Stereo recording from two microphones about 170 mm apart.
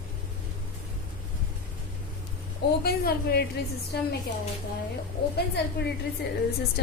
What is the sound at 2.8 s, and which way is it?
Speech, 70° left (ahead or behind).